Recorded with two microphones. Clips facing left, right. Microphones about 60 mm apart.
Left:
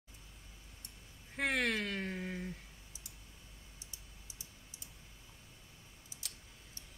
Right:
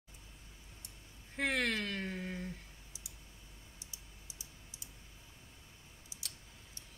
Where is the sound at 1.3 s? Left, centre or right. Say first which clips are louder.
Even; centre.